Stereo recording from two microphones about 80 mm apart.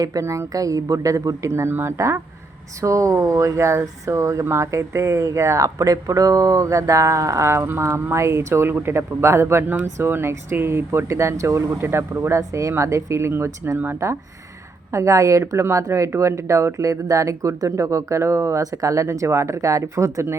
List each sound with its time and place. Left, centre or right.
0.0 s speech: right
14.9 s speech: right